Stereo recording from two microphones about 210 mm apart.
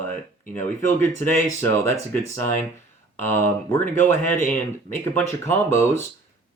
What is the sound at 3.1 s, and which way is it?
Speech, 10° left (ahead or behind).